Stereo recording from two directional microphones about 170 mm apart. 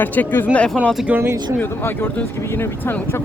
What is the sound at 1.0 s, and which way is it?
Speech, 10° right (ahead or behind).